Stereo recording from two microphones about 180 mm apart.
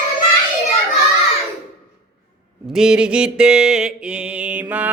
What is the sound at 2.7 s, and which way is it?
Mantra, 5° right (ahead or behind).